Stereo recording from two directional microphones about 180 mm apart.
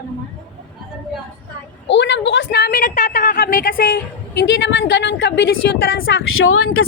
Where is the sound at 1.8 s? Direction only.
80° left; by 4.4 s 55° left (ahead or behind).